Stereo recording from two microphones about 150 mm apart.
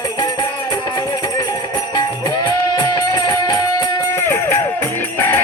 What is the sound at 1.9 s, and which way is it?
Music, 25° left (ahead or behind).